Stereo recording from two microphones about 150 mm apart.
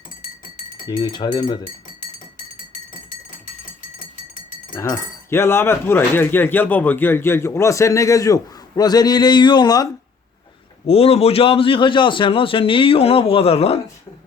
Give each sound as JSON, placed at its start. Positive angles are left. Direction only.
{"t": 0.9, "sound": "speech", "side_deg": 25}
{"t": 4.7, "sound": "speech", "side_deg": 20}
{"t": 10.8, "sound": "a man's voice", "side_deg": 40}